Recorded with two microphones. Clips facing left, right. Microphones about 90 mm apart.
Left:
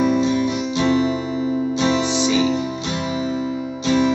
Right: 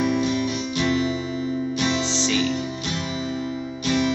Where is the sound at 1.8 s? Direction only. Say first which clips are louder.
Left 6 dB; 15° left (ahead or behind).